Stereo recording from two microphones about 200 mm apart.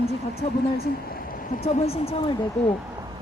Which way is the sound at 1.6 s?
30° left (ahead or behind).